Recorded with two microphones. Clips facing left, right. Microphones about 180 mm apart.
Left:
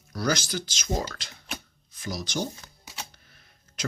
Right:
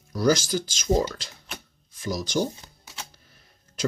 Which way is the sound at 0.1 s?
45° right (ahead or behind).